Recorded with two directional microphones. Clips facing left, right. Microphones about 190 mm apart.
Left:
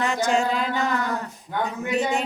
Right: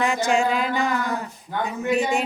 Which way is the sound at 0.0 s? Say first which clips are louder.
Right 1 dB; 10° right (ahead or behind).